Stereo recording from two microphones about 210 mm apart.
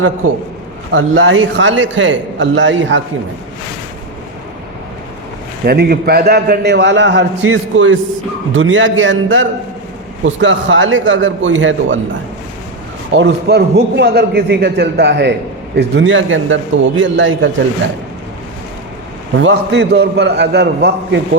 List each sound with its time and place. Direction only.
0.9 s a man's voice: 65° right (ahead or behind)
5.6 s a man's voice: 50° right (ahead or behind); by 11.9 s 65° right (ahead or behind)
13.1 s a man's voice: 55° right (ahead or behind)
19.4 s a man's voice: 55° right (ahead or behind)